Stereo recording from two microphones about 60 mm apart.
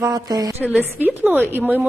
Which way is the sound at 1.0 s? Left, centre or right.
Right.